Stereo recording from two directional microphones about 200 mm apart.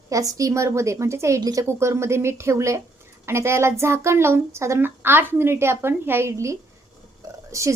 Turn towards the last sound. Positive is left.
turn(degrees=-15)  # may be behind; listen again after turning